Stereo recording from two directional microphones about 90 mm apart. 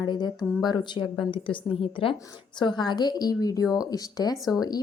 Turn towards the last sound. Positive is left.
turn(degrees=45)  # may be behind; listen again after turning